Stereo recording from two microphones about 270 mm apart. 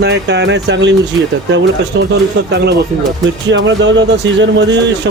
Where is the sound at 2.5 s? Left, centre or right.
Right.